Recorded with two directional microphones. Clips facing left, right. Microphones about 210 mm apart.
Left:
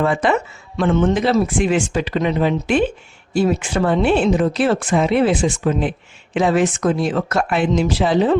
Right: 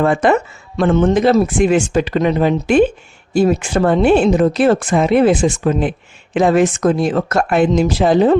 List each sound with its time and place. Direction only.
0.0 s speech: 50° right (ahead or behind)